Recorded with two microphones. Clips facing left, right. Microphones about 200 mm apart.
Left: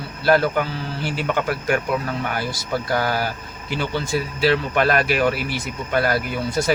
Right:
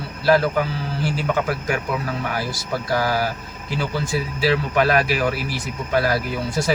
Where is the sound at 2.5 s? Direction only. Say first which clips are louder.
Even; centre (ahead or behind).